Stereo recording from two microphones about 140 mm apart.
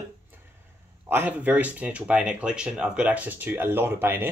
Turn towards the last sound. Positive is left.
turn(degrees=-15)  # may be behind; listen again after turning